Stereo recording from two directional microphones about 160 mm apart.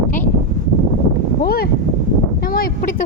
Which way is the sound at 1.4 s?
70° left (ahead or behind).